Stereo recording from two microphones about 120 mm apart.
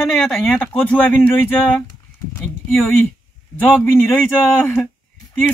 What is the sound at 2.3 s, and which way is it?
Speech, 15° left (ahead or behind).